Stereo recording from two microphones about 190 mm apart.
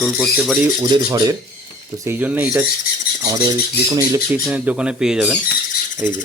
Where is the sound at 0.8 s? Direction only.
20° right (ahead or behind).